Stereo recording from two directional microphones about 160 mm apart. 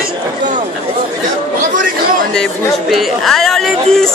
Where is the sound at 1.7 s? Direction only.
55° right (ahead or behind).